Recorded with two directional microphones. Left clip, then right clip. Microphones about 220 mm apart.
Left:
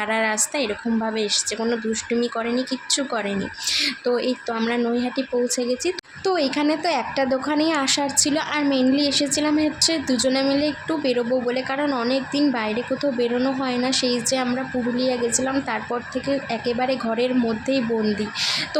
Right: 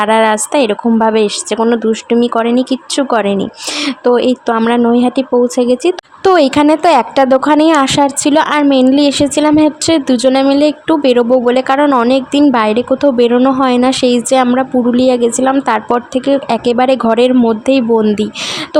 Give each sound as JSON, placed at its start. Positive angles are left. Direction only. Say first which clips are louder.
{"t": 0.0, "sound": "a woman's voice", "louder": "right 12 dB", "side_deg": -35}